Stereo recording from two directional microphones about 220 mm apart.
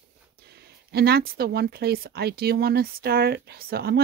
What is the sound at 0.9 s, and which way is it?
Speech, 45° right (ahead or behind).